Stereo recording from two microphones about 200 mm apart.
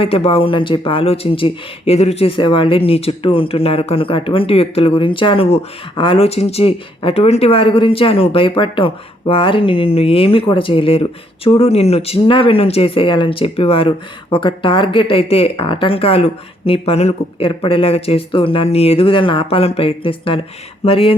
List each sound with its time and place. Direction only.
0.0 s speech: 30° left (ahead or behind)